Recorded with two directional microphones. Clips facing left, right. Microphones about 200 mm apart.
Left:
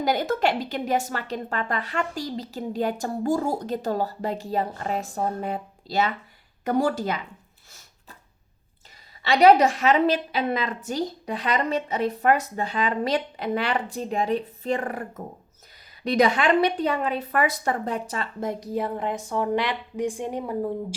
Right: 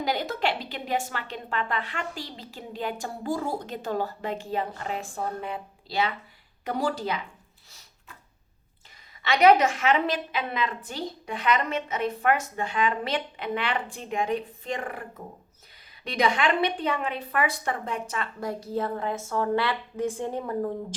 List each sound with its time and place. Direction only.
0.0 s a woman's voice: 45° left (ahead or behind)
9.2 s a woman's voice: 35° left (ahead or behind)
16.0 s a woman's voice: 40° left (ahead or behind)
18.3 s a woman's voice: 20° left (ahead or behind)